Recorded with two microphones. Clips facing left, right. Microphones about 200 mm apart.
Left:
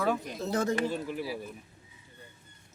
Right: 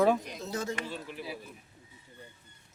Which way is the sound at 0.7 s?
40° left (ahead or behind).